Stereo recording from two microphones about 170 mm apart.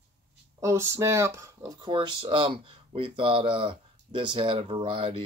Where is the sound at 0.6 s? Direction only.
15° right (ahead or behind).